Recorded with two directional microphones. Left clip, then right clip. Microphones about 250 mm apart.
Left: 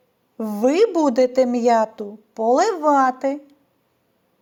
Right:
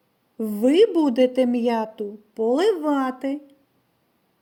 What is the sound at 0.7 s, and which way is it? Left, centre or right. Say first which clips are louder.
A woman's voice: even; left.